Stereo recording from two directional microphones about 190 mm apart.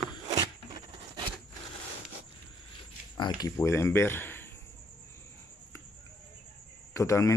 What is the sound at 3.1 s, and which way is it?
Speech, 20° left (ahead or behind).